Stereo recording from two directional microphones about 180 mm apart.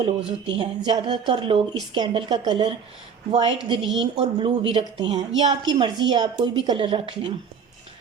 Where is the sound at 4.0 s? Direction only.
30° right (ahead or behind).